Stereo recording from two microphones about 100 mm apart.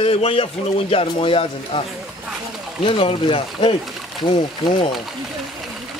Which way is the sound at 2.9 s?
60° left (ahead or behind).